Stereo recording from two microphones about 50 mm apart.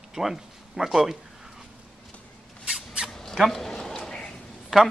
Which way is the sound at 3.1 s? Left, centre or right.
Centre.